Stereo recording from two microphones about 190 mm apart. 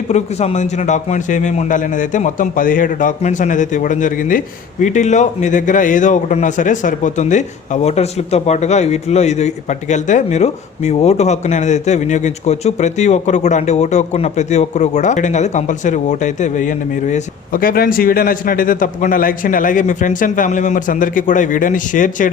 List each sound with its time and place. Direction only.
0.1 s a man's voice: 35° left (ahead or behind)